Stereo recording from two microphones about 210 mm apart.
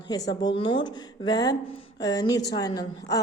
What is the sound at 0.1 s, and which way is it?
Speech, 20° left (ahead or behind).